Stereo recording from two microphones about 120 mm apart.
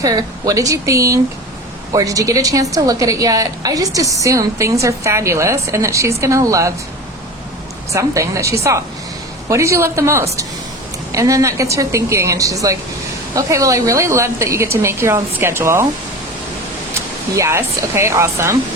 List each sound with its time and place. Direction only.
0.0 s a woman's voice: 30° right (ahead or behind)
7.9 s a woman's voice: 25° right (ahead or behind)
17.3 s a woman's voice: 25° right (ahead or behind)